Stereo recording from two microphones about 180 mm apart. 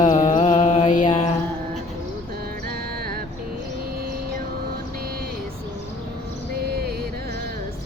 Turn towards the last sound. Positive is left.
turn(degrees=-60)  # may be behind; listen again after turning